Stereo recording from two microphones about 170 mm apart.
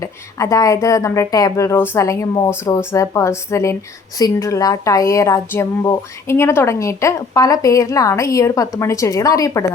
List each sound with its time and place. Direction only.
0.0 s speech: 20° left (ahead or behind)